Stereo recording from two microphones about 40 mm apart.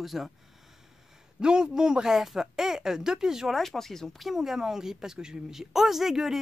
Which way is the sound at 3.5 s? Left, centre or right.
Centre.